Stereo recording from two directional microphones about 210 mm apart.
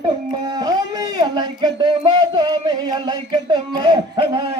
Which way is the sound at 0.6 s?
20° right (ahead or behind).